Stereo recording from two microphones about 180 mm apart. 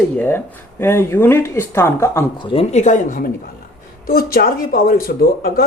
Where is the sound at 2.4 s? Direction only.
35° left (ahead or behind); by 5.6 s 55° left (ahead or behind).